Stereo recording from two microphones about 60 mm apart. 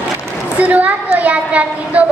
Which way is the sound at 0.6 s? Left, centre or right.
Right.